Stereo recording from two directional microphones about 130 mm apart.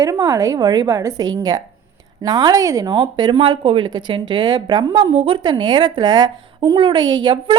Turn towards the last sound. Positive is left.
turn(degrees=-35)  # may be behind; listen again after turning